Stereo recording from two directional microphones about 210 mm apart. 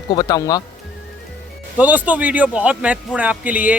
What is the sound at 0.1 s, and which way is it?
Speech, 20° left (ahead or behind).